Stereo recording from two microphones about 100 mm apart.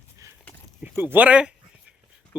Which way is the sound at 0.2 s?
35° right (ahead or behind).